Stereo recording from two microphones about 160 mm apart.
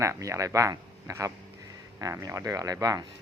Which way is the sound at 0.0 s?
20° right (ahead or behind).